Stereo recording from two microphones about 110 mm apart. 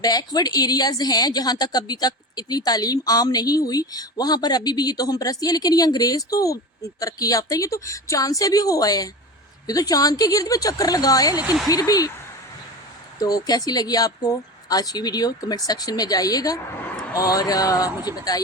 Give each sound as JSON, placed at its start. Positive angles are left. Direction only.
{"t": 0.0, "sound": "a woman's voice", "side_deg": 35}
{"t": 13.1, "sound": "a woman's voice", "side_deg": 35}